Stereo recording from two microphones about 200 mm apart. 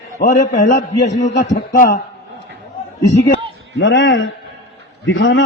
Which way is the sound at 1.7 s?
45° left (ahead or behind).